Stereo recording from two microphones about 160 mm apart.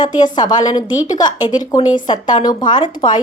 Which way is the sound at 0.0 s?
25° left (ahead or behind).